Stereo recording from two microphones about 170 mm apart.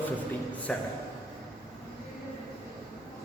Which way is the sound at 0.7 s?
5° left (ahead or behind).